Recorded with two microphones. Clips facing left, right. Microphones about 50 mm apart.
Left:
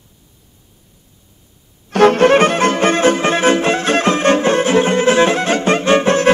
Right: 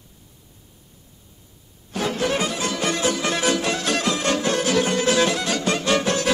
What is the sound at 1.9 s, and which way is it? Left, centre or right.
Music, left.